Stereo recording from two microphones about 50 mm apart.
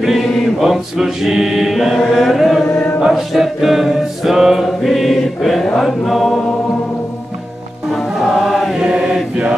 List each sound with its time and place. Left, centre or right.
0.0 s chant: centre
2.6 s chant: centre
3.1 s chant: centre
5.8 s music: centre
7.9 s choir: centre
8.7 s chant: centre